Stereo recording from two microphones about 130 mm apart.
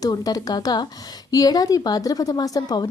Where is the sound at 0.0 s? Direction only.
30° left (ahead or behind).